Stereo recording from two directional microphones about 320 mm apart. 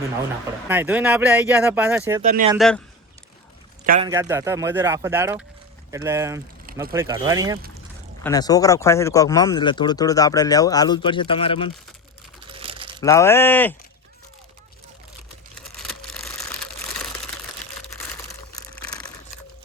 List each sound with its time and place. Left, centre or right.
0.7 s speech: centre
2.2 s speech: right
2.6 s speech: centre
4.0 s speech: centre
8.2 s speech: centre
12.5 s crumpling: centre
13.0 s speech: centre
15.5 s a sound: centre